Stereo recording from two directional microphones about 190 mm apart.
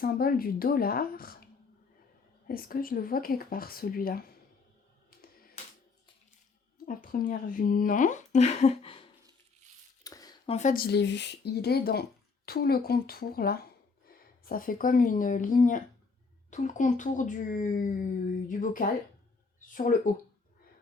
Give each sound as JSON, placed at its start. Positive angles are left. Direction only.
{"t": 0.0, "sound": "speech", "side_deg": 50}
{"t": 2.5, "sound": "speech", "side_deg": 50}
{"t": 6.8, "sound": "speech", "side_deg": 45}
{"t": 10.0, "sound": "a sound", "side_deg": 20}
{"t": 10.4, "sound": "speech", "side_deg": 35}
{"t": 10.8, "sound": "speech", "side_deg": 65}